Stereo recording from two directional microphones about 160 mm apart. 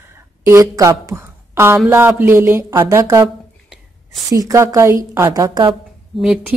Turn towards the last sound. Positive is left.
turn(degrees=-5)  # may be behind; listen again after turning